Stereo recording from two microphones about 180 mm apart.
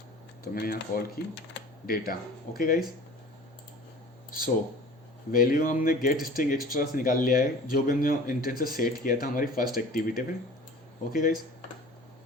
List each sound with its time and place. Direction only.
0.4 s speech: 55° left (ahead or behind)
5.3 s speech: 50° left (ahead or behind)